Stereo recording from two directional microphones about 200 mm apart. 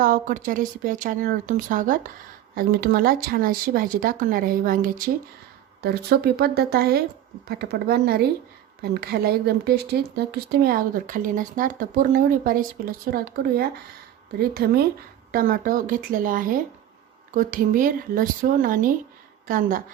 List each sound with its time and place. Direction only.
0.0 s speech: 40° right (ahead or behind)